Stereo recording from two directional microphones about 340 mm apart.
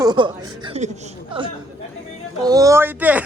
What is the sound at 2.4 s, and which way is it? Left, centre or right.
Speech, centre.